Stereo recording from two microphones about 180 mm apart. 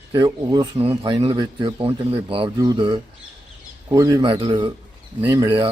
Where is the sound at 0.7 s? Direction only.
30° right (ahead or behind).